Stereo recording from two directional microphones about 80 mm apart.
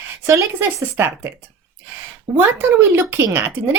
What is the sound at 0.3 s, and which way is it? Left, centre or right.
Speech, right.